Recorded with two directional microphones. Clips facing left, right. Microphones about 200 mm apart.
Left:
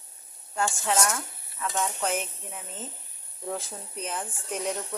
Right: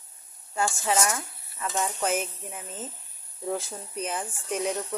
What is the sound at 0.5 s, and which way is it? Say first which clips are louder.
Speech: right 1 dB; 5° right (ahead or behind).